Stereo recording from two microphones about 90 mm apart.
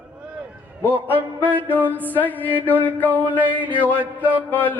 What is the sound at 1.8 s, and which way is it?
Speech, 20° left (ahead or behind).